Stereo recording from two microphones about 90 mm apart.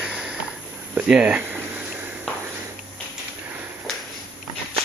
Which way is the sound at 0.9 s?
15° right (ahead or behind).